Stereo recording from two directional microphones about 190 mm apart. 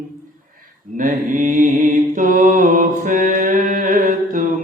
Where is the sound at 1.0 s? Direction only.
45° right (ahead or behind).